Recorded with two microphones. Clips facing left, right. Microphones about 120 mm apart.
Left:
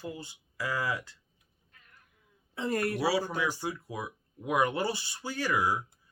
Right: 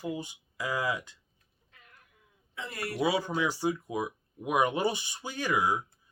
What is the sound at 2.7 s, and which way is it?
Speech, 50° left (ahead or behind).